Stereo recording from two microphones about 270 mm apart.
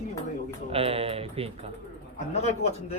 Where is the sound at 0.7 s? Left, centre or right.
Right.